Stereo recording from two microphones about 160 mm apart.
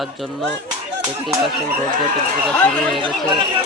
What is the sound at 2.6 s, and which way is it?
Speech, 10° left (ahead or behind).